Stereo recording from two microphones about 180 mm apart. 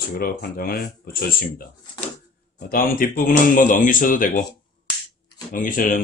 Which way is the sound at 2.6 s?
50° left (ahead or behind).